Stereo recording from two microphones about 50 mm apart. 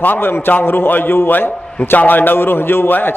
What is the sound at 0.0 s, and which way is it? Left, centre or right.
A man's voice, left.